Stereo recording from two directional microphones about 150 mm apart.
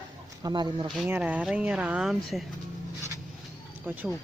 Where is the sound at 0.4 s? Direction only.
30° right (ahead or behind).